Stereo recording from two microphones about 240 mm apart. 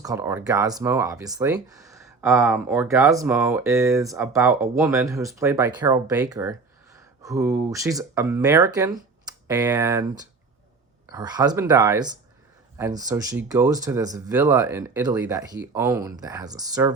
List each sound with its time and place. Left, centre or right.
0.0 s speech: centre